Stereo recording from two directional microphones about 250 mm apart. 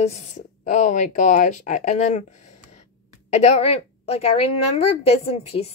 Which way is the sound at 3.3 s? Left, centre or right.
Left.